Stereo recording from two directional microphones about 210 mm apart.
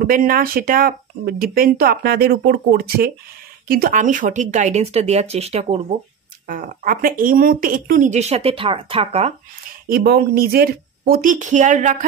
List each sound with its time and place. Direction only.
0.0 s speech: 45° right (ahead or behind)
6.4 s speech: 40° right (ahead or behind)
9.8 s speech: 45° right (ahead or behind)